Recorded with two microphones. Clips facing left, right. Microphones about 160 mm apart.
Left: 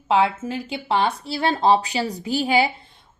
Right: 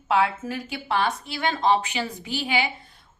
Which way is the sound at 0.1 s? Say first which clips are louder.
Left 3 dB; 30° left (ahead or behind).